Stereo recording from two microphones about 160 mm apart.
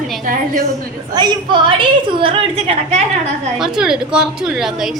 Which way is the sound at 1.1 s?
25° right (ahead or behind).